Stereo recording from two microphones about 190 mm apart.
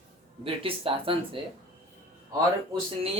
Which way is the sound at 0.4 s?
30° right (ahead or behind).